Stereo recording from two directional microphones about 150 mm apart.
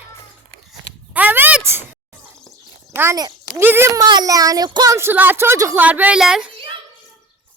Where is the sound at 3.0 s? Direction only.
20° right (ahead or behind); by 6.5 s 5° right (ahead or behind).